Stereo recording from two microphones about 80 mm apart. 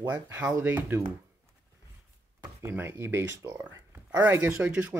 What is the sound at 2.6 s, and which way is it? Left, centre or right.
Speech, right.